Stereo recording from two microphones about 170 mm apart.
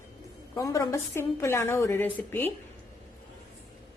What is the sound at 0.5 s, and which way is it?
A woman's voice, 20° left (ahead or behind).